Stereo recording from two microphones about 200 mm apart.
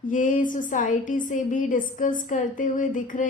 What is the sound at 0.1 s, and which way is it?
A woman's voice, 40° left (ahead or behind).